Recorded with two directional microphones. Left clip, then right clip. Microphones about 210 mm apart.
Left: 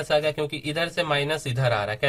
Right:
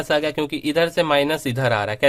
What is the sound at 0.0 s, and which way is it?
Speech, 40° right (ahead or behind).